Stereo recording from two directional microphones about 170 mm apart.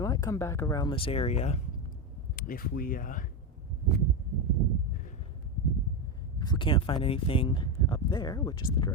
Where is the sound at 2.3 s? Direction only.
55° left (ahead or behind).